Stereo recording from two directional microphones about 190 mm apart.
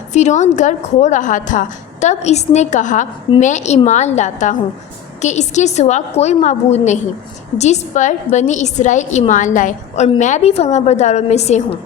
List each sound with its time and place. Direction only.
0.1 s a woman's voice: 40° left (ahead or behind)